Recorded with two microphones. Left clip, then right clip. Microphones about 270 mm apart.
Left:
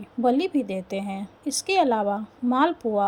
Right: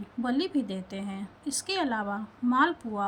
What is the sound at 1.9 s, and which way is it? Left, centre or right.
Speech, left.